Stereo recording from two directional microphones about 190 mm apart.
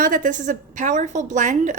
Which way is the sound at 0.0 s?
45° right (ahead or behind).